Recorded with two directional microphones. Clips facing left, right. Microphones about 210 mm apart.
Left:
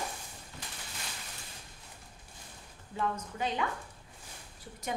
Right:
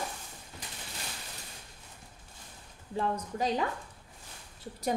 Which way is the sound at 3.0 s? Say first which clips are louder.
Right 3 dB; 35° right (ahead or behind).